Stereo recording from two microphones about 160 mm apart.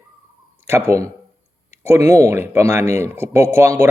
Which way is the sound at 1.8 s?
15° right (ahead or behind).